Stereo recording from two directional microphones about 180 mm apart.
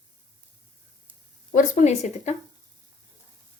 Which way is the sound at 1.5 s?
40° left (ahead or behind).